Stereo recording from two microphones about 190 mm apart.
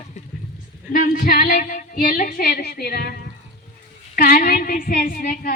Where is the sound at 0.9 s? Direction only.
50° left (ahead or behind).